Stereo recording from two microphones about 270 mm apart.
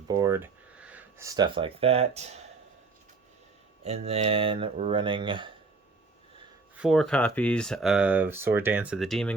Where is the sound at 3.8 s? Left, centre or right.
Right.